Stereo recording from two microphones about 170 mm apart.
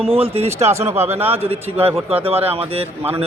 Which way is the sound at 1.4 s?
35° right (ahead or behind).